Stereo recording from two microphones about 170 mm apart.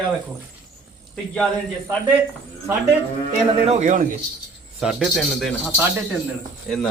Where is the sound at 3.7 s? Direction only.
45° right (ahead or behind).